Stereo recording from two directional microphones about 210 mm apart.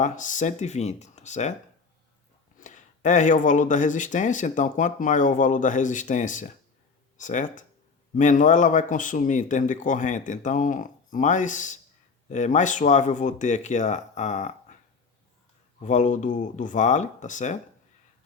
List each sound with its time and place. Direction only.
0.0 s speech: 35° left (ahead or behind)
2.6 s speech: 35° left (ahead or behind)
15.8 s speech: 35° left (ahead or behind)